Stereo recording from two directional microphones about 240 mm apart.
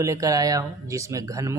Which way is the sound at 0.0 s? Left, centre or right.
Centre.